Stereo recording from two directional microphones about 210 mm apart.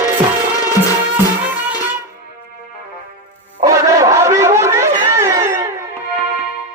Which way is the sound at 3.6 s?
15° right (ahead or behind).